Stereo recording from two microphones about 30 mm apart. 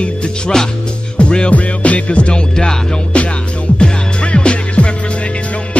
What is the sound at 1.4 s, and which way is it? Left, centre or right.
Music, left.